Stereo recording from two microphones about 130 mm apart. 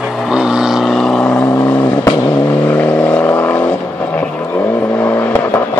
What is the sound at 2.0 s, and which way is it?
Vehicle, 25° left (ahead or behind).